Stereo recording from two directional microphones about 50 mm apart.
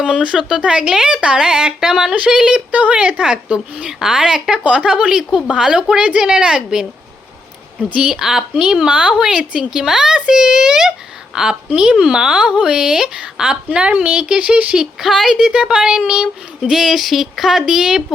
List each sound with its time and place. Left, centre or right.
0.0 s speech: centre
0.6 s speech: right
4.6 s speech: right
7.8 s speech: right
8.1 s speech: centre
9.1 s speech: centre
9.4 s speech: right
9.6 s speech: centre
11.7 s speech: right
14.8 s speech: centre
16.7 s a sound: centre